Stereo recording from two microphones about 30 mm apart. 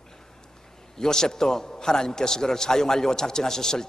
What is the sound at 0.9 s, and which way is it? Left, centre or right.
A man's voice, centre.